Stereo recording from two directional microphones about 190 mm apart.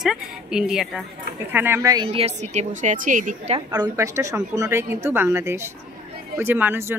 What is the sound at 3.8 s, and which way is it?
A woman's voice, 15° right (ahead or behind).